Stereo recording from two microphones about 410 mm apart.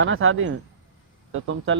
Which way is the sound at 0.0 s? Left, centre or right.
Right.